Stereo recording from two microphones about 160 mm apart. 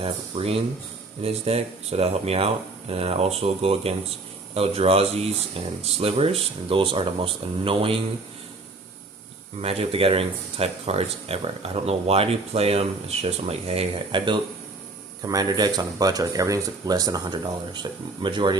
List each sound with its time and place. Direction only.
0.0 s speech: 35° right (ahead or behind)
9.6 s speech: 40° right (ahead or behind)